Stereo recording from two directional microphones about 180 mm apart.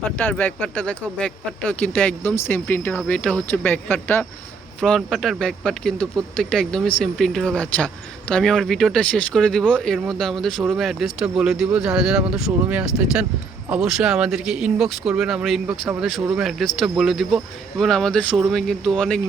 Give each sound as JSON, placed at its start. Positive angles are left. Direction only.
{"t": 0.2, "sound": "speech", "side_deg": 10}